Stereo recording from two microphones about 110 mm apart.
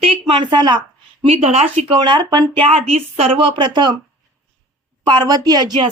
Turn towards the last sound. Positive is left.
turn(degrees=-35)  # may be behind; listen again after turning